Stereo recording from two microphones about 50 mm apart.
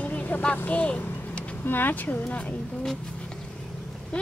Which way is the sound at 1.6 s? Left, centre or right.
Left.